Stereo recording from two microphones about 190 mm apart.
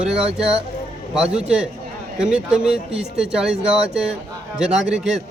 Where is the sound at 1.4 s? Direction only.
5° right (ahead or behind).